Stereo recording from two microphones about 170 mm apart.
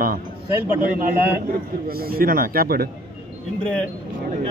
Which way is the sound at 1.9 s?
60° right (ahead or behind).